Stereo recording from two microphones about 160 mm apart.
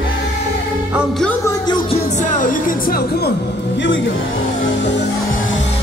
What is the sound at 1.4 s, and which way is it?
Music, 25° left (ahead or behind).